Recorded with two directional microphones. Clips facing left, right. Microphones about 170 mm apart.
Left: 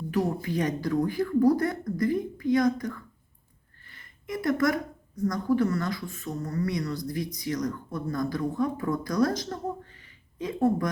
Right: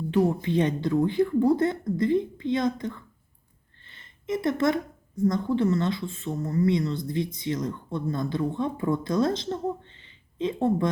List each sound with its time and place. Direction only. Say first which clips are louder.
0.4 s a woman's voice: right 3 dB; 25° right (ahead or behind)